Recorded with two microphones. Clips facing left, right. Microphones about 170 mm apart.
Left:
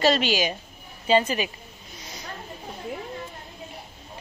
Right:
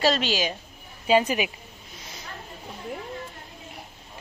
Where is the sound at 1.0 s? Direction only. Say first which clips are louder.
Even; 10° right (ahead or behind).